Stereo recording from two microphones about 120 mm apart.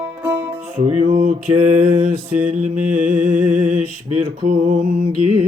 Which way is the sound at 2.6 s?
90° right.